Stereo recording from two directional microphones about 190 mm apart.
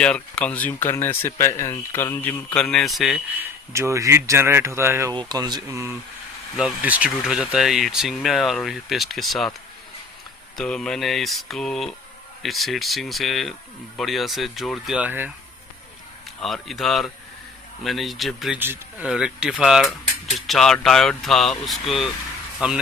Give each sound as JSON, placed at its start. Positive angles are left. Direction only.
{"t": 0.0, "sound": "speech", "side_deg": 5}
{"t": 3.7, "sound": "speech", "side_deg": -15}
{"t": 10.6, "sound": "speech", "side_deg": 5}
{"t": 16.4, "sound": "speech", "side_deg": 0}